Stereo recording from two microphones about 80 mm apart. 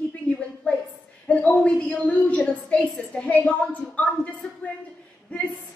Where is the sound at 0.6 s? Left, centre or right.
Centre.